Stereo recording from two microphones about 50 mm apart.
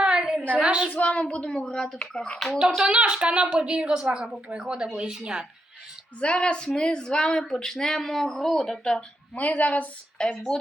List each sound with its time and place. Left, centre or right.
0.0 s a sound: centre
0.4 s a sound: right
0.9 s speech: left
2.6 s a woman's voice: centre
6.1 s speech: left
9.3 s a woman's voice: left
10.2 s speech: centre